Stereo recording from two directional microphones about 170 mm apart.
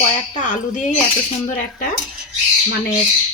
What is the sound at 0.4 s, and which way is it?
Speech, 50° left (ahead or behind).